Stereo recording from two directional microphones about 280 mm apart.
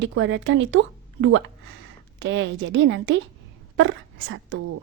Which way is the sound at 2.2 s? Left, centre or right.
Right.